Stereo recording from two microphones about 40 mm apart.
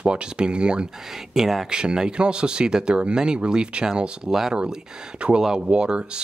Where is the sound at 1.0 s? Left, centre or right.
Centre.